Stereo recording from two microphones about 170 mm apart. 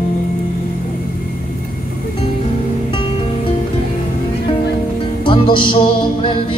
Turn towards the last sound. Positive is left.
turn(degrees=30)  # may be behind; listen again after turning